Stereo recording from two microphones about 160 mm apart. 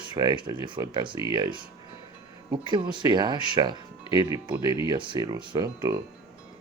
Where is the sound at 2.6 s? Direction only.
30° right (ahead or behind).